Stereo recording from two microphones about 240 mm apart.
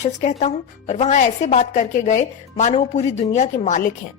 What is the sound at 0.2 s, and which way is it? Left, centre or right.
A woman's voice, left.